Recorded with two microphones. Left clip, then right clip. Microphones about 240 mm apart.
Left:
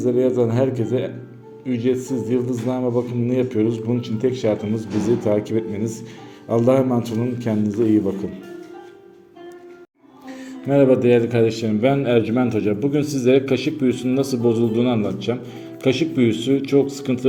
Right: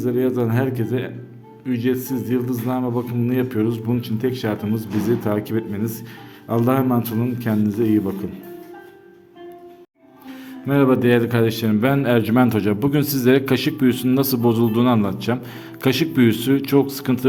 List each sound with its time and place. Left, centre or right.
0.1 s a man's voice: right
2.6 s a man's voice: right
3.1 s a man's voice: right
10.2 s a man's voice: centre